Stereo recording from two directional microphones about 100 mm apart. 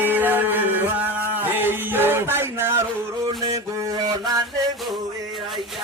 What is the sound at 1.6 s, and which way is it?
Music, 20° right (ahead or behind).